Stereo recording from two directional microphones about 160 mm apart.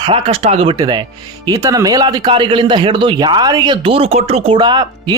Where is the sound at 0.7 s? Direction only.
25° right (ahead or behind).